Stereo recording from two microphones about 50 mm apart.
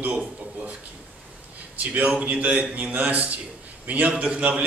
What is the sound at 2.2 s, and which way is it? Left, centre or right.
A man's voice, right.